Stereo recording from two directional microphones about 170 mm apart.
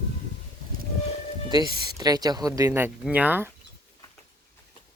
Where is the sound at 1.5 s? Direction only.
20° right (ahead or behind).